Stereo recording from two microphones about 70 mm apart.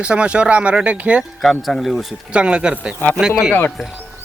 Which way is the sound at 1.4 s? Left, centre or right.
Centre.